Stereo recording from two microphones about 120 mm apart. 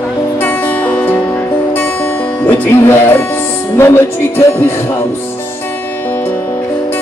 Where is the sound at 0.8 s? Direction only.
15° left (ahead or behind).